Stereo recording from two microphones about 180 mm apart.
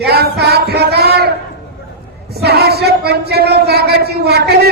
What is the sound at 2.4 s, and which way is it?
A man's voice, 60° right (ahead or behind).